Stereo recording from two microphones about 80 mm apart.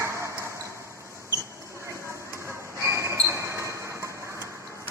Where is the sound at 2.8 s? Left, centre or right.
Right.